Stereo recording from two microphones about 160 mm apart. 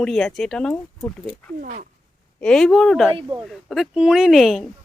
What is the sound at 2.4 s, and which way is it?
Speech, 5° left (ahead or behind).